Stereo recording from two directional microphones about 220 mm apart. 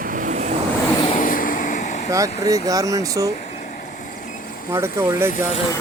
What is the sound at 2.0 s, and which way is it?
Speech, 15° right (ahead or behind).